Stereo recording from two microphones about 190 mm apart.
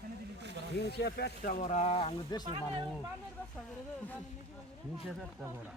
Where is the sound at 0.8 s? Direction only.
60° left (ahead or behind).